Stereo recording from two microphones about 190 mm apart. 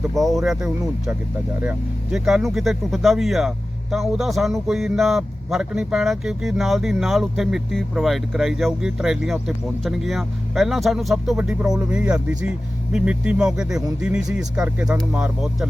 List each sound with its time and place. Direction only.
0.0 s a man's voice: centre (ahead or behind)
2.1 s a man's voice: centre (ahead or behind)